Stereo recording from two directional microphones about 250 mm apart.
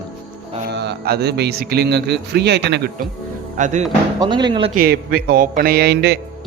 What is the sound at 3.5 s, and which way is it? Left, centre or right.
Speech, right.